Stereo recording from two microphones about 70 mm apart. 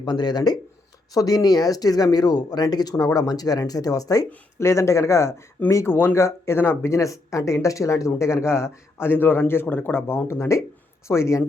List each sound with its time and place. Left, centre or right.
0.0 s speech: left
1.1 s speech: left
4.5 s speech: left